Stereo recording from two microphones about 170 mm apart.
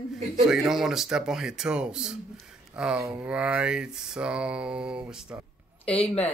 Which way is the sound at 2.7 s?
5° right (ahead or behind).